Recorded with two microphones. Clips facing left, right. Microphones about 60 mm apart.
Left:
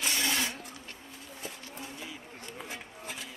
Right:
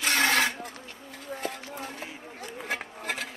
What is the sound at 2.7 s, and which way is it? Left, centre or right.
Music, right.